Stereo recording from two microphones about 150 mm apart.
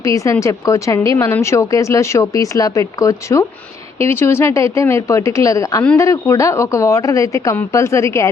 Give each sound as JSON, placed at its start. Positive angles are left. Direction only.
{"t": 0.0, "sound": "speech", "side_deg": 20}